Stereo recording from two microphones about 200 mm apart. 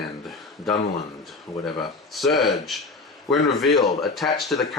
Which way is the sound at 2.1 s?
Centre (ahead or behind).